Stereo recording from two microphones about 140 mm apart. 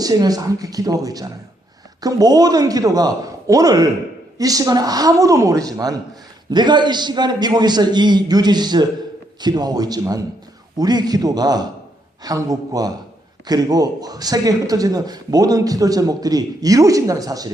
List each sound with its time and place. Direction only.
0.0 s a man's voice: 25° right (ahead or behind)